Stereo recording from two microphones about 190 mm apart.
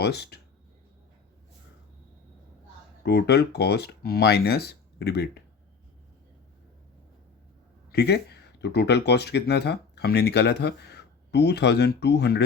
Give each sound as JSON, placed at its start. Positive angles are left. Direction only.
{"t": 0.0, "sound": "speech", "side_deg": 60}
{"t": 3.0, "sound": "speech", "side_deg": 60}
{"t": 7.9, "sound": "speech", "side_deg": 60}